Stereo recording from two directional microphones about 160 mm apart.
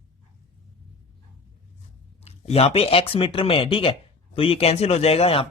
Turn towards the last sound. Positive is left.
turn(degrees=40)  # may be behind; listen again after turning